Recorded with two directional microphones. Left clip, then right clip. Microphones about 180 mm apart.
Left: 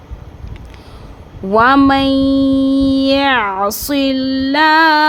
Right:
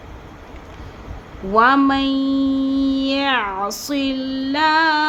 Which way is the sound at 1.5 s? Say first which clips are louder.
Left 4 dB; 55° left (ahead or behind).